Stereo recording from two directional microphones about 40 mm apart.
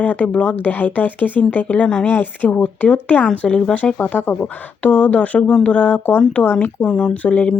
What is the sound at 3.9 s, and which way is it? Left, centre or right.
Speech, left.